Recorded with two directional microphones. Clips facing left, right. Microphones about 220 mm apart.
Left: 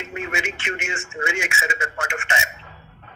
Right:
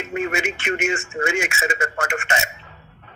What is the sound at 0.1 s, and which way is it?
A man's voice, 45° right (ahead or behind).